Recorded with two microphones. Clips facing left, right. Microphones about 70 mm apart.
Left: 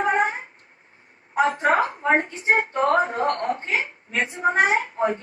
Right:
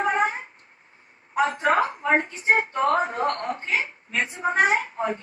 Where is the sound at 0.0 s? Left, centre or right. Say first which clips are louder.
Left 1 dB; left.